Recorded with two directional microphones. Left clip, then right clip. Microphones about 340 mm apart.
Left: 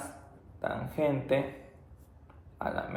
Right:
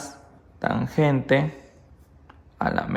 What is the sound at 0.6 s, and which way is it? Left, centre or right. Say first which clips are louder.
Speech: right 7 dB; right.